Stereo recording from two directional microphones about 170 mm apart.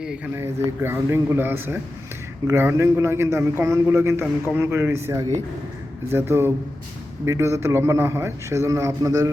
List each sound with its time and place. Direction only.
0.3 s a man's voice: 15° right (ahead or behind)